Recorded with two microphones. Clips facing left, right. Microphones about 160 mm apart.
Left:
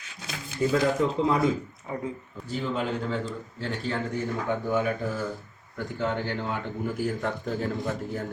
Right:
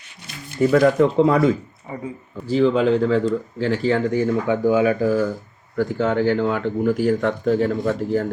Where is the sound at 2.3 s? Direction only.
90° right.